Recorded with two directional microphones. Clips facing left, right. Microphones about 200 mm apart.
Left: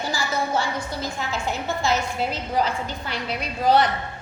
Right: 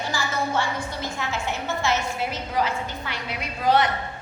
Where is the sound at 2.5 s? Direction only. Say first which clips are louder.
Left 1 dB; 35° left (ahead or behind).